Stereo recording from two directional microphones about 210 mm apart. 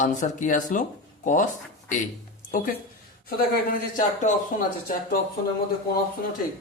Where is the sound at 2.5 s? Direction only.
40° left (ahead or behind).